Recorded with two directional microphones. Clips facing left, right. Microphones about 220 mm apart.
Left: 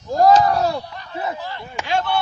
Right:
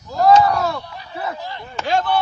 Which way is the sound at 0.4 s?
35° left (ahead or behind).